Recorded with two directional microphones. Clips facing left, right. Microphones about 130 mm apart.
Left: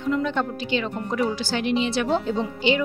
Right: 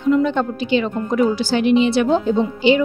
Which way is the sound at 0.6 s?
10° right (ahead or behind).